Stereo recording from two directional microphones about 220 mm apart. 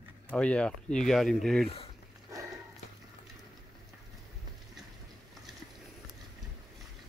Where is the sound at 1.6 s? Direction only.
25° left (ahead or behind).